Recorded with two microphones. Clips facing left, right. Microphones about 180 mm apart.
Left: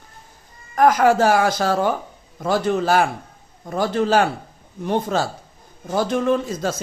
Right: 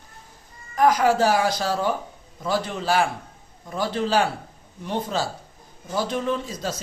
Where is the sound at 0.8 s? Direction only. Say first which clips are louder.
Left 3 dB; 50° left (ahead or behind).